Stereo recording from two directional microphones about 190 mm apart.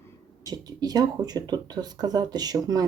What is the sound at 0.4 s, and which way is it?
Speech, 20° right (ahead or behind).